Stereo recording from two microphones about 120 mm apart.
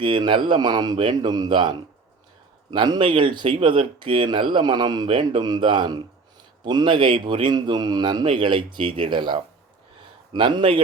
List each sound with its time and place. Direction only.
0.0 s speech: 45° right (ahead or behind)